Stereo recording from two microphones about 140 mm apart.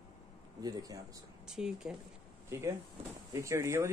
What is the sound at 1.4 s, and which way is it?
Speech, 5° right (ahead or behind).